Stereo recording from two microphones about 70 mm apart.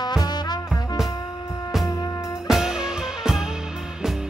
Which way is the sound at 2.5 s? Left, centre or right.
Centre.